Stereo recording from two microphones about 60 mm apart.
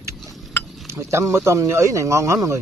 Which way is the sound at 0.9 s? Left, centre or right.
Right.